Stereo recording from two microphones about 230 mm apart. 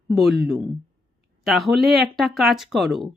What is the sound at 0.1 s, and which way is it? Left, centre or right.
Speech, centre.